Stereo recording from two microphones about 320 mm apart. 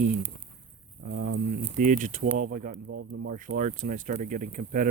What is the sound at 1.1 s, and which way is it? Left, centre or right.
Speech, right.